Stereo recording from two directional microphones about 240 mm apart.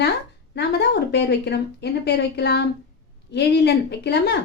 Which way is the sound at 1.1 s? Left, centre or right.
Left.